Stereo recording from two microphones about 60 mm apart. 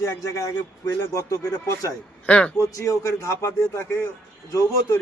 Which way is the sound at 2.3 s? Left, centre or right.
Centre.